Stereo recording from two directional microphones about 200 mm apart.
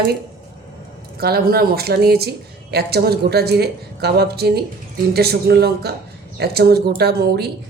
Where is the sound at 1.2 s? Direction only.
50° right (ahead or behind).